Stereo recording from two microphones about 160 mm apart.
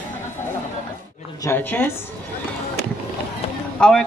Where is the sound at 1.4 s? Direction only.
10° left (ahead or behind).